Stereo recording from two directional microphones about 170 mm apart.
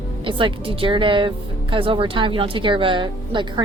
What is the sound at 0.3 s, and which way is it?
A woman's voice, 30° right (ahead or behind).